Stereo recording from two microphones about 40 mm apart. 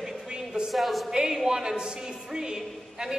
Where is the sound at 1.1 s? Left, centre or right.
Centre.